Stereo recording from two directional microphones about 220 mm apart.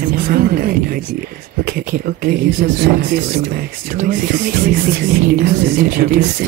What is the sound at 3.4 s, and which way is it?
Speech, 40° right (ahead or behind).